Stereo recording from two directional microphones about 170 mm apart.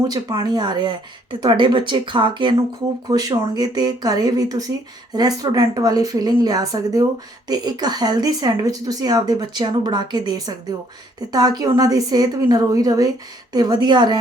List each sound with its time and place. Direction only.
0.1 s speech: 25° right (ahead or behind)